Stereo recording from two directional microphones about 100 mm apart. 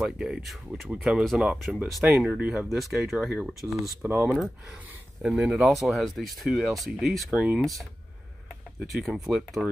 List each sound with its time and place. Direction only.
0.0 s speech: 5° right (ahead or behind)
2.1 s speech: 15° right (ahead or behind)
2.7 s speech: 5° right (ahead or behind)
4.0 s speech: 15° right (ahead or behind)
5.2 s speech: 5° right (ahead or behind)
8.8 s speech: centre (ahead or behind)